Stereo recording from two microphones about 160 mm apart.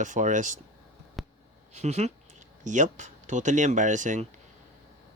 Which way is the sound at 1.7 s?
45° right (ahead or behind).